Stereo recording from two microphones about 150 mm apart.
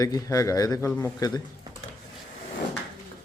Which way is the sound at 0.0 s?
20° left (ahead or behind).